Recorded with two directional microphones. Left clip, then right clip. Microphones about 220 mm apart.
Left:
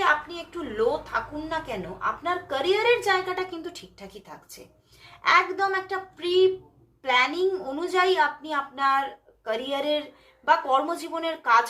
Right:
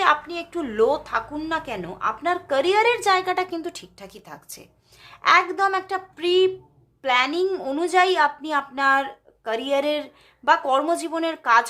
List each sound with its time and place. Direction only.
0.0 s a woman's voice: 45° right (ahead or behind)